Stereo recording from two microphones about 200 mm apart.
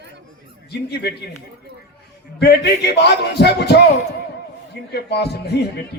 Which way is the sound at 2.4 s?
55° left (ahead or behind).